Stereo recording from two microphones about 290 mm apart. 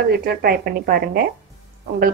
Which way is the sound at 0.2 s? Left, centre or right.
Right.